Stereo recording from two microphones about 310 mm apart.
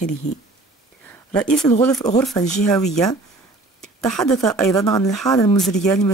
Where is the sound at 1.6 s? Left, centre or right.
Centre.